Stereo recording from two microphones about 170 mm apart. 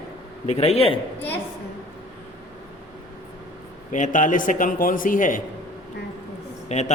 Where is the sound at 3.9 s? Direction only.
45° left (ahead or behind).